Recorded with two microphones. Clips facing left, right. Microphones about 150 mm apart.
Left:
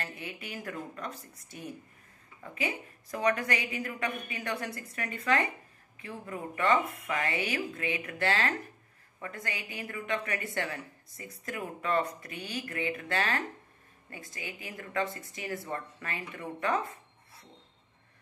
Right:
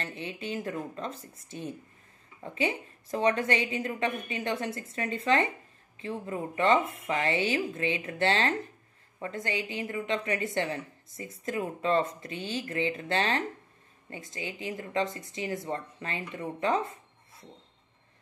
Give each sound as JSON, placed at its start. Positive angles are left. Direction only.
{"t": 0.0, "sound": "speech", "side_deg": -25}